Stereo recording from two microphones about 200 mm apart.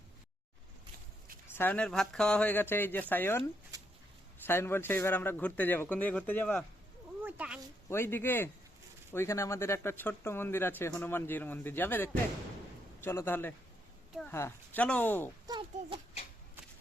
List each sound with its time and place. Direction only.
1.5 s speech: 10° left (ahead or behind)
4.4 s speech: 10° left (ahead or behind)
7.2 s speech: 10° right (ahead or behind)
7.9 s speech: 10° left (ahead or behind)
15.4 s a sound: 20° right (ahead or behind)